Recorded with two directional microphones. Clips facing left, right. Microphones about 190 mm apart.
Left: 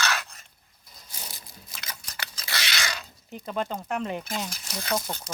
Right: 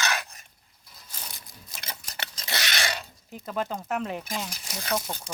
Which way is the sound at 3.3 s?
Centre (ahead or behind).